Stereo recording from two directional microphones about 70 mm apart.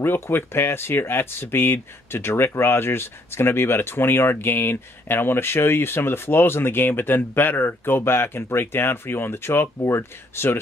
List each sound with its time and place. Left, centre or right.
0.0 s speech: left